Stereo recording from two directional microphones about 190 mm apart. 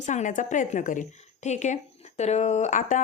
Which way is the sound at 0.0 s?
40° left (ahead or behind).